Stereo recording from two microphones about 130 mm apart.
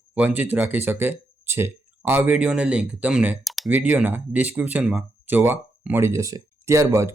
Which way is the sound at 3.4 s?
Centre (ahead or behind).